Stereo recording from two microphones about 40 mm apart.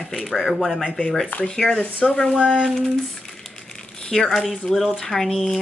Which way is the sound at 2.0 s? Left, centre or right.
Centre.